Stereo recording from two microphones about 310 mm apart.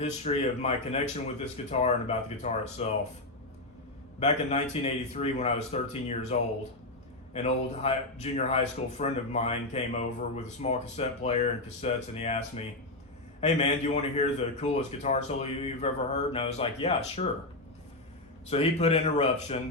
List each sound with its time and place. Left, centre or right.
0.0 s speech: left
4.2 s speech: left
7.4 s speech: centre
18.4 s speech: centre